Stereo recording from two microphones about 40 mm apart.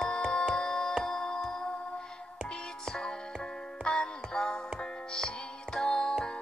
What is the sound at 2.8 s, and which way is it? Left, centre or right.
Music, centre.